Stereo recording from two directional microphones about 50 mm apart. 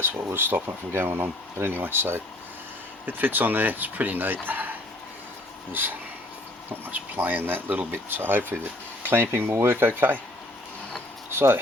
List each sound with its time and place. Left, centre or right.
0.3 s speech: right
6.7 s speech: right
11.3 s speech: right